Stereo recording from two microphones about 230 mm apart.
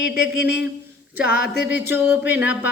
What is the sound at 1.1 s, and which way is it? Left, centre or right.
Speech, centre.